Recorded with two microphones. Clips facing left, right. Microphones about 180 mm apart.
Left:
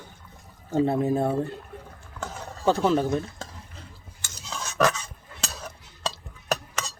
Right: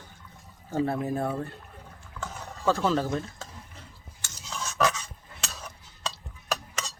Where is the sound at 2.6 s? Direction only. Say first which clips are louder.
Left 3 dB; 20° left (ahead or behind).